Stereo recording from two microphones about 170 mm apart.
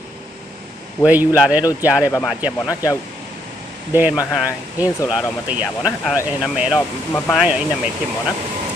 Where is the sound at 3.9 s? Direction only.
10° right (ahead or behind).